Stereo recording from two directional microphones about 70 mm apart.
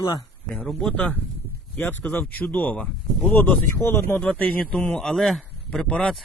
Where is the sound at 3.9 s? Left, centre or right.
Left.